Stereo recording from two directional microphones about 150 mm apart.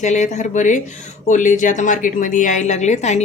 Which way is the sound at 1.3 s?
55° left (ahead or behind).